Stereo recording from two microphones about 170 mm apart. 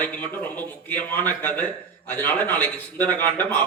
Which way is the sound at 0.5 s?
10° left (ahead or behind).